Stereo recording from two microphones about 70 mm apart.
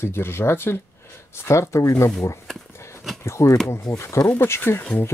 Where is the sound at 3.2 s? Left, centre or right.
Left.